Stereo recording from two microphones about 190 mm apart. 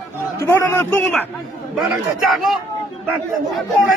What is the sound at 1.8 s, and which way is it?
Speech, centre (ahead or behind).